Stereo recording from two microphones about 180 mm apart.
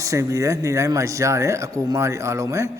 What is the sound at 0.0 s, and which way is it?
Speech, 15° right (ahead or behind).